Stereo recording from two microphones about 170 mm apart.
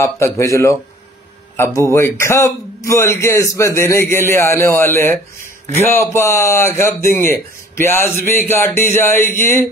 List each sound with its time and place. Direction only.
0.0 s a man's voice: 15° left (ahead or behind)